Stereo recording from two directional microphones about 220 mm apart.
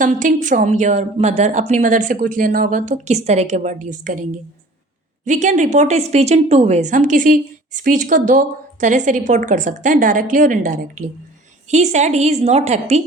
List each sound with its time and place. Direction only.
0.0 s a woman's voice: 35° right (ahead or behind)